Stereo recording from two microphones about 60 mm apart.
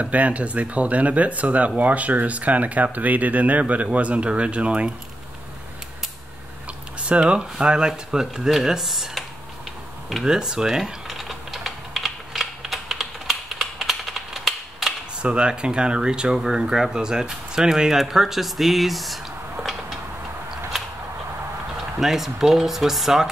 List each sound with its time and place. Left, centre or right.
0.0 s speech: right
7.0 s speech: centre
10.2 s typing: centre
15.2 s speech: centre
20.7 s a sound: centre
22.0 s speech: centre